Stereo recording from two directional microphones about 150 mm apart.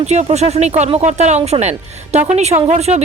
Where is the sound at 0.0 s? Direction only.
45° right (ahead or behind).